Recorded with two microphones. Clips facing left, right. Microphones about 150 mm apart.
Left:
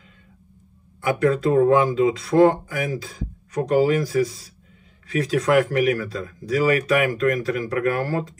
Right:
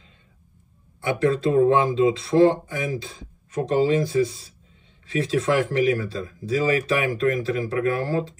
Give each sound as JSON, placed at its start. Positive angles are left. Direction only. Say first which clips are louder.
{"t": 1.0, "sound": "speech", "louder": "left 2 dB", "side_deg": -30}